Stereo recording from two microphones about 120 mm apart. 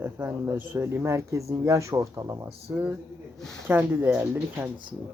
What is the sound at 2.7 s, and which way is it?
Speech, 15° right (ahead or behind).